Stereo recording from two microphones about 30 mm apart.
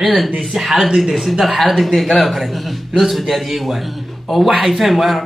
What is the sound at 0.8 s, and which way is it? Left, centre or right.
Speech, right.